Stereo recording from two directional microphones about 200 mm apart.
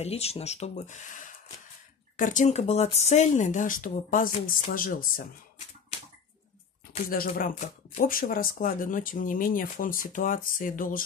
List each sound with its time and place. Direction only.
0.0 s speech: 30° left (ahead or behind)
7.1 s speech: 45° left (ahead or behind)